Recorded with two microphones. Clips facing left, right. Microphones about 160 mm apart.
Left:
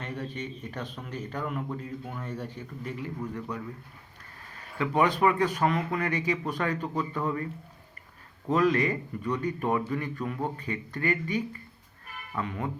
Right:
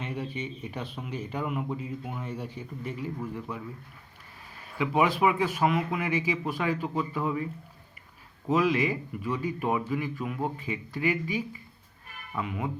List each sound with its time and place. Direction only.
0.0 s speech: 10° right (ahead or behind)
4.8 s speech: 5° right (ahead or behind)
8.4 s speech: 5° right (ahead or behind)